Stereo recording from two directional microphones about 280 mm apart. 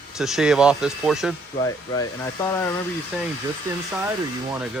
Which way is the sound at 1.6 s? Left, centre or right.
Centre.